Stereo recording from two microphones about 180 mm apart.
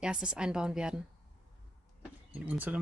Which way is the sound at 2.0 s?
10° right (ahead or behind).